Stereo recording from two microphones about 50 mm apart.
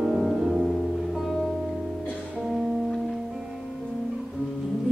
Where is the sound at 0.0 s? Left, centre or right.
Centre.